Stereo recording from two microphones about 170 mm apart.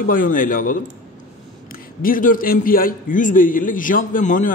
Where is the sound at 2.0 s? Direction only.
55° left (ahead or behind).